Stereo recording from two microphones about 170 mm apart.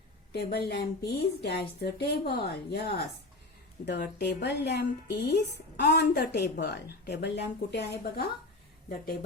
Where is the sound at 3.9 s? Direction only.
85° left.